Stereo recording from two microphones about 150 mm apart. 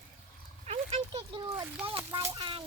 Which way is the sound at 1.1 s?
30° right (ahead or behind).